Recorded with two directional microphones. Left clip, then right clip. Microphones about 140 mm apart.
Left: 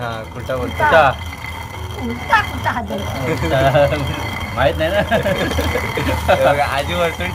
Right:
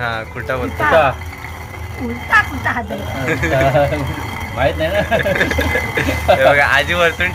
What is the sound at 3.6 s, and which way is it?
Speech, 20° right (ahead or behind).